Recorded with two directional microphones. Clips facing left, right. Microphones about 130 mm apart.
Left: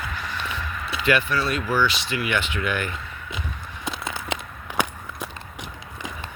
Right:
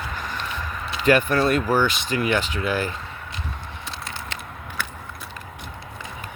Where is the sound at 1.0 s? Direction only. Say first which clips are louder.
Right 4 dB; 45° right (ahead or behind).